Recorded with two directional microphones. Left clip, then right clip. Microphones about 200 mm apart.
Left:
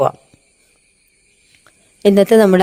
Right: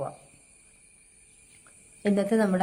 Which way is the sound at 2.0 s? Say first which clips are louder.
Left 15 dB; 45° left (ahead or behind).